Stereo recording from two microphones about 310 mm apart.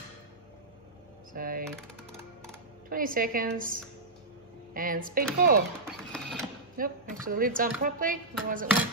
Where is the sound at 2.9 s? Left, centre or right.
Right.